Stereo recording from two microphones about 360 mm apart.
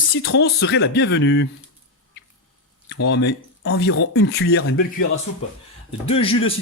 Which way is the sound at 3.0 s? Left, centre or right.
Left.